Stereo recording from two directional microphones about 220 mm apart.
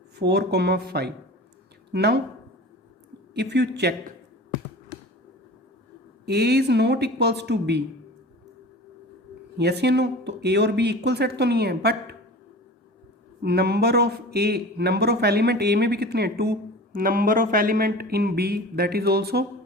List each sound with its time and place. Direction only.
0.2 s speech: 50° right (ahead or behind)
3.3 s speech: 50° right (ahead or behind)
6.2 s speech: 50° right (ahead or behind)
9.6 s speech: 50° right (ahead or behind)
13.4 s speech: 50° right (ahead or behind)